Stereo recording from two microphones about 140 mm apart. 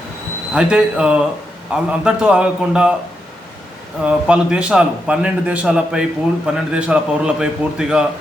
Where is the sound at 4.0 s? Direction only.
5° right (ahead or behind).